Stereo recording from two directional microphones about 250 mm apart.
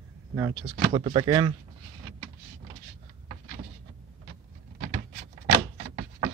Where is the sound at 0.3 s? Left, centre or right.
Centre.